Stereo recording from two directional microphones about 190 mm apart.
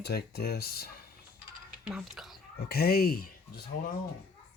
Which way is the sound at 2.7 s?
55° left (ahead or behind).